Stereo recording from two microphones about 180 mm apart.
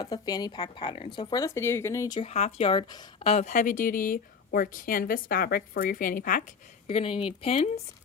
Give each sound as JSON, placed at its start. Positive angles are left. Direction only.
{"t": 0.0, "sound": "speech", "side_deg": 20}
{"t": 3.2, "sound": "a woman's voice", "side_deg": 40}
{"t": 6.8, "sound": "speech", "side_deg": 35}